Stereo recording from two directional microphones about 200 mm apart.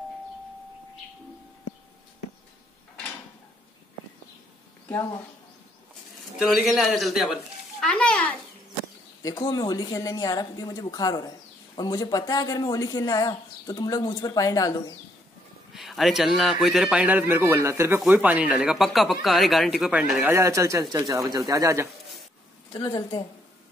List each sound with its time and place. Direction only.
6.3 s a man's voice: centre (ahead or behind); by 15.0 s 15° left (ahead or behind)
15.7 s a man's voice: centre (ahead or behind); by 21.8 s 15° right (ahead or behind)
22.7 s a woman's voice: 20° left (ahead or behind)